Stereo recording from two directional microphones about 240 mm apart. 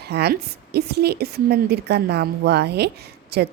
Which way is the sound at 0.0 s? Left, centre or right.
Right.